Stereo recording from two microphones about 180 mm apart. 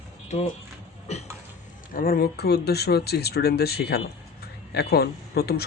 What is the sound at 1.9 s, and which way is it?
Speech, 55° left (ahead or behind).